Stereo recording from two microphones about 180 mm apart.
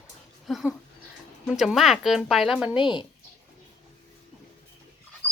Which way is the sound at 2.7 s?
25° left (ahead or behind).